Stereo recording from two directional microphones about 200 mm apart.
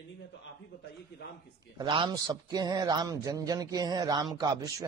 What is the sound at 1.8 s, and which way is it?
A man's voice, 20° right (ahead or behind).